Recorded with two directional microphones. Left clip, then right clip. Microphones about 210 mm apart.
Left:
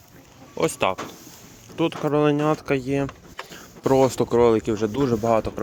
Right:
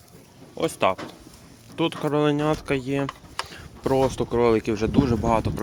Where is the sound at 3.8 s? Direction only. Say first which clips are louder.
Left 3 dB; 20° left (ahead or behind).